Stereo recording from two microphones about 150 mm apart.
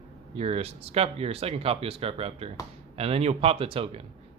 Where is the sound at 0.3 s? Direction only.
40° right (ahead or behind).